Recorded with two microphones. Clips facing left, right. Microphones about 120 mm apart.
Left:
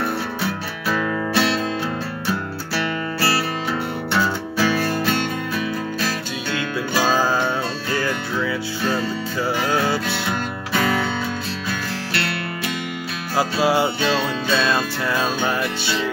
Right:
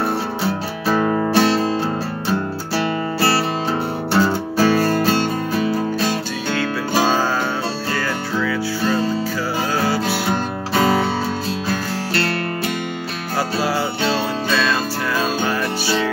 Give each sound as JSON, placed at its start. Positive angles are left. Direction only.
{"t": 0.0, "sound": "music", "side_deg": -35}
{"t": 8.8, "sound": "music", "side_deg": -30}
{"t": 12.1, "sound": "music", "side_deg": -35}
{"t": 13.4, "sound": "music", "side_deg": 20}